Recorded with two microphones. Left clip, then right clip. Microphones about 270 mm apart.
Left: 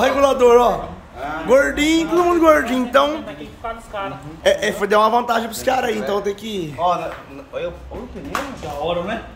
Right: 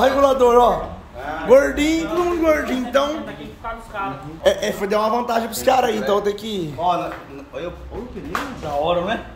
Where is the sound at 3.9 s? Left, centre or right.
Left.